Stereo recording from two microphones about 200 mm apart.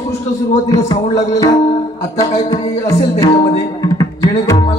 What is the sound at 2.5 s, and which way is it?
Music, 15° left (ahead or behind).